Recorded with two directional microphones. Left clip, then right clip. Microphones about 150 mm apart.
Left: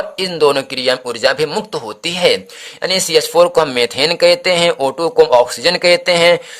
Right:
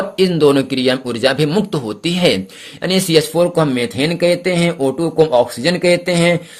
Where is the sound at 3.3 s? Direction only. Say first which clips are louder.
Left 4 dB; 45° left (ahead or behind).